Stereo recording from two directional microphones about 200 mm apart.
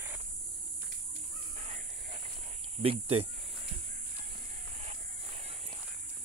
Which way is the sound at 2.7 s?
30° right (ahead or behind).